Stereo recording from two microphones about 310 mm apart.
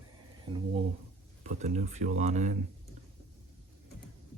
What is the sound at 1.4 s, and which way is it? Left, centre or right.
Speech, right.